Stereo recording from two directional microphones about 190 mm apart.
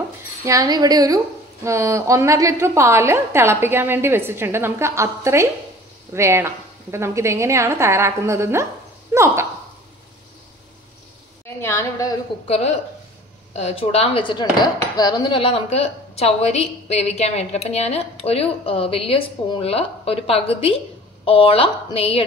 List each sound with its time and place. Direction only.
0.5 s a woman's voice: 20° right (ahead or behind)
11.6 s a woman's voice: 15° left (ahead or behind)
12.4 s a woman's voice: 35° left (ahead or behind)